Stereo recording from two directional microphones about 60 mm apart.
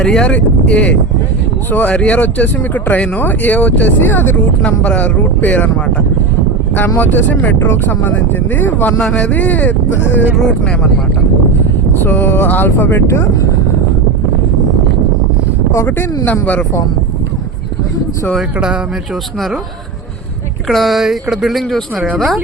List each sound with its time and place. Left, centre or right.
0.0 s speech: centre
0.3 s speech: left
4.0 s speech: left
4.6 s speech: left
7.0 s speech: left
10.3 s speech: centre
12.0 s speech: left
13.1 s speech: left
16.2 s speech: left
20.7 s speech: centre